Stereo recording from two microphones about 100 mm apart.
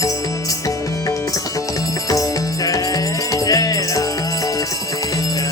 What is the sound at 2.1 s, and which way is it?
Music, 35° left (ahead or behind).